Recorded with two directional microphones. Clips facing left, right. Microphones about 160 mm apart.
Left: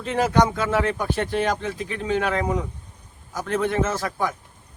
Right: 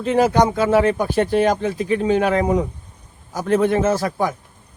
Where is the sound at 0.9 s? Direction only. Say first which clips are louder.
Right 6 dB; 35° right (ahead or behind).